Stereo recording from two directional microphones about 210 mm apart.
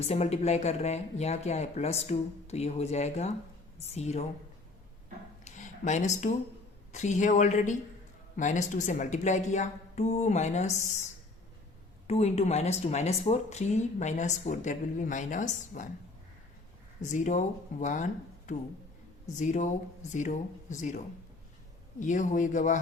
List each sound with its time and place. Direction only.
0.0 s speech: 30° left (ahead or behind)
5.5 s a sound: 35° left (ahead or behind)
6.9 s speech: 35° left (ahead or behind)
12.0 s speech: 30° left (ahead or behind)
17.0 s speech: 35° left (ahead or behind)
22.0 s speech: 35° left (ahead or behind)